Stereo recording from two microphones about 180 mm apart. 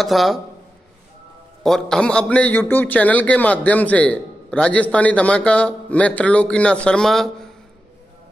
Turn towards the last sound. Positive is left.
turn(degrees=0)  # may be behind; listen again after turning